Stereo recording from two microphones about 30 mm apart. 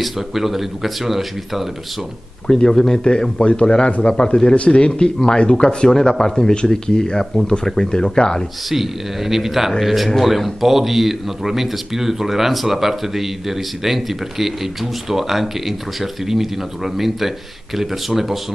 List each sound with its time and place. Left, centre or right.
0.0 s speech: centre
2.4 s speech: centre
3.0 s speech: left
8.6 s speech: centre